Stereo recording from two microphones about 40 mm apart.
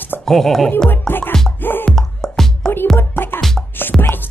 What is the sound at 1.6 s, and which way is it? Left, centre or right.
Music, left.